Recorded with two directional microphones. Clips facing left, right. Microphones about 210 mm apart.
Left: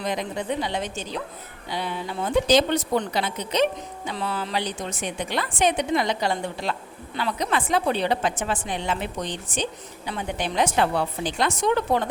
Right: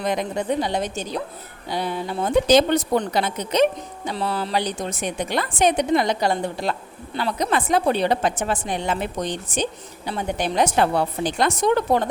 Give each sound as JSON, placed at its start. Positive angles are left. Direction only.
{"t": 0.0, "sound": "a woman's voice", "side_deg": -50}